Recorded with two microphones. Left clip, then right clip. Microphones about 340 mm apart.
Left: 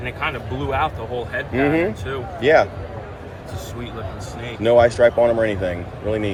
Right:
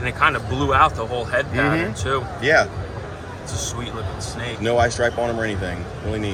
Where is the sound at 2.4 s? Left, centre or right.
Centre.